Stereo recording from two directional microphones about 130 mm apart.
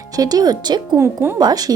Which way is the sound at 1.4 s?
30° right (ahead or behind).